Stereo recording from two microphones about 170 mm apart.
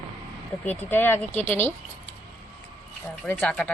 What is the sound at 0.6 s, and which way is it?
Speech, 10° left (ahead or behind).